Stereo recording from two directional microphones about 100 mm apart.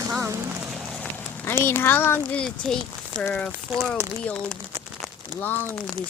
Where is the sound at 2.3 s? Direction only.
5° left (ahead or behind).